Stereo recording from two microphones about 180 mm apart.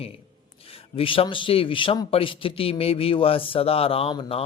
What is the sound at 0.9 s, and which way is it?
A man's voice, 30° left (ahead or behind).